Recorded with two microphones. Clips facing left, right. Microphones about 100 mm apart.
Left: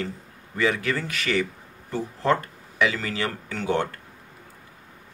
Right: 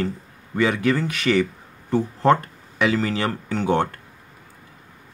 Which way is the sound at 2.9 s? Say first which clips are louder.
Right 6 dB; 30° right (ahead or behind).